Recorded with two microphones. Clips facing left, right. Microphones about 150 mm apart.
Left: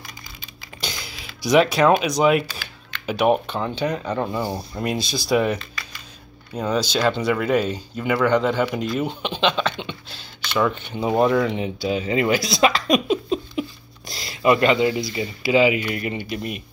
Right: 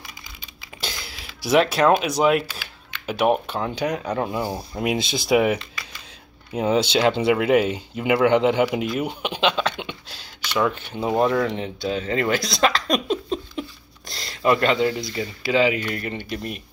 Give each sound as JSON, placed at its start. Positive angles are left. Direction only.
{"t": 0.7, "sound": "a sound", "side_deg": 0}
{"t": 2.9, "sound": "speech", "side_deg": 0}
{"t": 4.9, "sound": "speech", "side_deg": -20}